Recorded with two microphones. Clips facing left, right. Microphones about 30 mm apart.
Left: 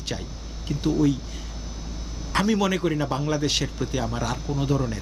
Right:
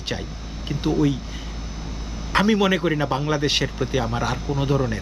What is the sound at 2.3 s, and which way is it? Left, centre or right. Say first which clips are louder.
Speech: right 4 dB; right.